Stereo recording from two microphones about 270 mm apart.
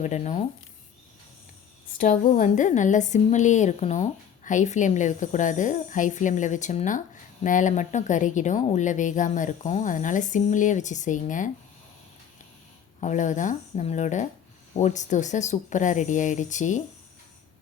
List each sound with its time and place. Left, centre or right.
0.0 s a woman's voice: left
2.0 s a woman's voice: left
13.0 s a woman's voice: left